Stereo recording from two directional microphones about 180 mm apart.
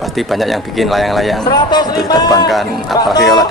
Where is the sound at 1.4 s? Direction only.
25° left (ahead or behind).